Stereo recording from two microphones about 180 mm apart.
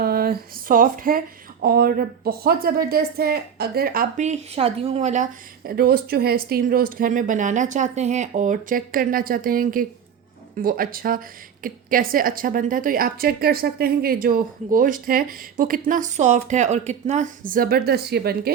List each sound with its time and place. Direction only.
0.0 s a woman's voice: 55° right (ahead or behind)
4.2 s speech: 35° right (ahead or behind); by 18.5 s 60° right (ahead or behind)